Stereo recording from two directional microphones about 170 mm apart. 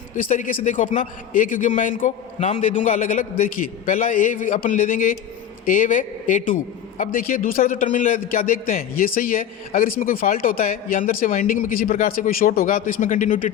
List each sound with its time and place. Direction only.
0.2 s a man's voice: 50° left (ahead or behind)